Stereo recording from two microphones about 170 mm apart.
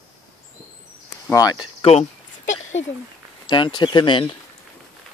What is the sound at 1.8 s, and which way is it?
Speech, 40° left (ahead or behind).